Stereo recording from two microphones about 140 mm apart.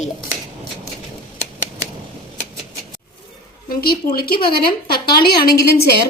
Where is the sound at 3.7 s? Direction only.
90° left.